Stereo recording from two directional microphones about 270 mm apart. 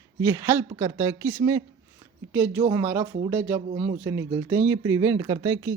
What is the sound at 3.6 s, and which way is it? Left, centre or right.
Speech, right.